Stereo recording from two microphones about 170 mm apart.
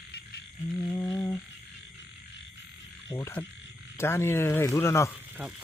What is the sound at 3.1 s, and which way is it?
Speech, 15° left (ahead or behind).